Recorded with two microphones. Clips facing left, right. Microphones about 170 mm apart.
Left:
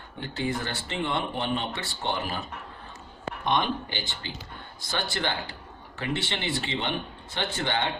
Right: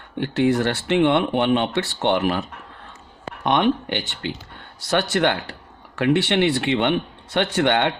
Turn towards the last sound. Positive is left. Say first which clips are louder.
# right 10 dB
turn(degrees=-70)  # may be behind; listen again after turning